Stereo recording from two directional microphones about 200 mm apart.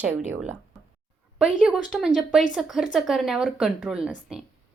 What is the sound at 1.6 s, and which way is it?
Speech, centre (ahead or behind).